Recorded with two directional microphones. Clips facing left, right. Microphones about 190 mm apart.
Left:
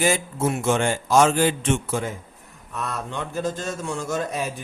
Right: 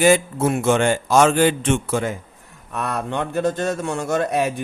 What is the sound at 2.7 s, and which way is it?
A man's voice, 65° right (ahead or behind).